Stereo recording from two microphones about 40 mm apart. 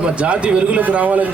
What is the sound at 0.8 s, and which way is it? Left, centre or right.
Speech, right.